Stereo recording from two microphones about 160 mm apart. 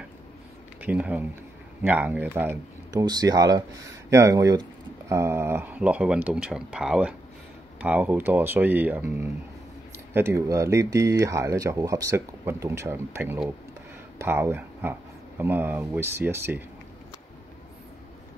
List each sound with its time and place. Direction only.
0.7 s speech: 10° right (ahead or behind)